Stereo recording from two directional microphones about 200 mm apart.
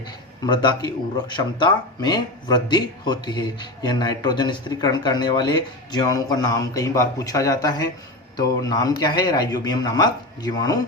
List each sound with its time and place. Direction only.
0.4 s speech: 20° left (ahead or behind)